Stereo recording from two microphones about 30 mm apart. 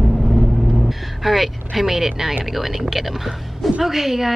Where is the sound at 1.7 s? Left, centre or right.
Centre.